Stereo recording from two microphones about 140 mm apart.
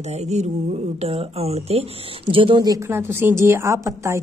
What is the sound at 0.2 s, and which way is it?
Mantra, 55° right (ahead or behind).